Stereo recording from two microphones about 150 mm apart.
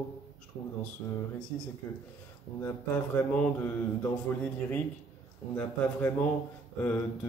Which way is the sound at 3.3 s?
15° left (ahead or behind).